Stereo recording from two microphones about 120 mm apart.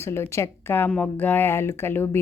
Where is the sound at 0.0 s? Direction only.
20° left (ahead or behind).